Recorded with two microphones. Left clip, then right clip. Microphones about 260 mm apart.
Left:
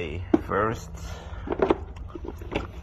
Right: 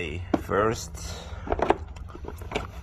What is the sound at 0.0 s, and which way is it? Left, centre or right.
Speech, centre.